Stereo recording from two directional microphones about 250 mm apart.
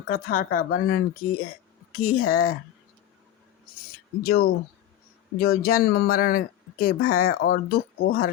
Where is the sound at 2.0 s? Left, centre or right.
Left.